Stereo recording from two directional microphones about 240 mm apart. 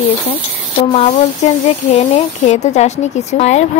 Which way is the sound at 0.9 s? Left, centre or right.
Left.